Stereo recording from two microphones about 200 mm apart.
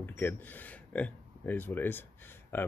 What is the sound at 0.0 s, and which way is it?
Speech, 10° left (ahead or behind).